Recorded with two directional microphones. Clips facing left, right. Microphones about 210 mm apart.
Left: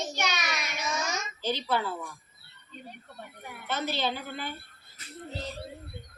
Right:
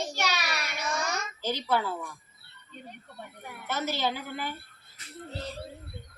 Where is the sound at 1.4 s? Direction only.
15° right (ahead or behind).